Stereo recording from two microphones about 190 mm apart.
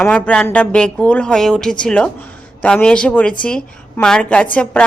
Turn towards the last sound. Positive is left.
turn(degrees=5)  # may be behind; listen again after turning